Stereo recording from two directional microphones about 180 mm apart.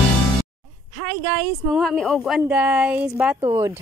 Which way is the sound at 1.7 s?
Centre (ahead or behind).